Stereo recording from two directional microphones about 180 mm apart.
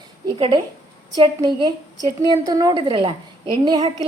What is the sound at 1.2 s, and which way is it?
A woman's voice, 25° right (ahead or behind).